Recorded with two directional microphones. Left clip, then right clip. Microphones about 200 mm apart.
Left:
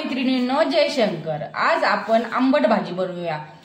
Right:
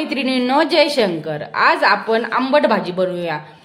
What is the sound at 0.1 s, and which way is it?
A woman's voice, 55° right (ahead or behind).